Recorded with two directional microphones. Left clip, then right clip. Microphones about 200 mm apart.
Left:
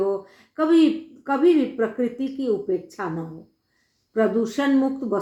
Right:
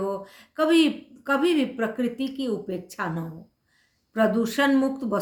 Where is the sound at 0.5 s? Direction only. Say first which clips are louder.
Left 2 dB; 20° right (ahead or behind).